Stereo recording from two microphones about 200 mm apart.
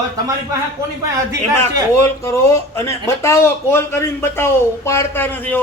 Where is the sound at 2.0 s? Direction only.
15° left (ahead or behind).